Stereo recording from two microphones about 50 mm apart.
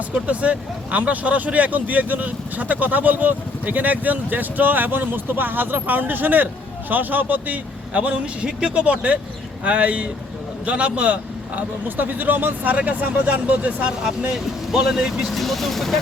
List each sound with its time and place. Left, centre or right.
0.1 s speech: right
14.7 s speech: centre
15.3 s speech: centre